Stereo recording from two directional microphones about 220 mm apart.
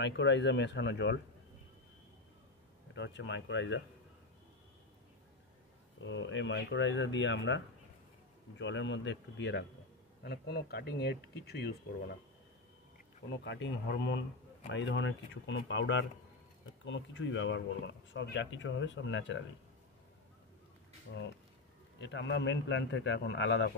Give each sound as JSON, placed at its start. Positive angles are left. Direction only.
{"t": 0.0, "sound": "speech", "side_deg": 55}
{"t": 2.9, "sound": "speech", "side_deg": 55}
{"t": 5.9, "sound": "speech", "side_deg": 55}
{"t": 13.3, "sound": "speech", "side_deg": 55}
{"t": 21.9, "sound": "speech", "side_deg": 55}